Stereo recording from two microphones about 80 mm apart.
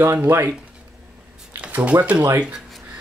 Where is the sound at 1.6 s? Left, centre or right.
Centre.